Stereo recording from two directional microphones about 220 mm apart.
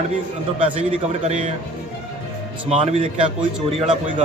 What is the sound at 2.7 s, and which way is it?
Speech, 30° right (ahead or behind).